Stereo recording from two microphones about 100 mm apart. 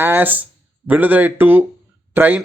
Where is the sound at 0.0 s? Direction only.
20° right (ahead or behind).